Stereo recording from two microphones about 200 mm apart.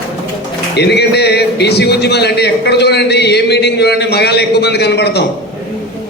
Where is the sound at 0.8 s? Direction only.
55° left (ahead or behind).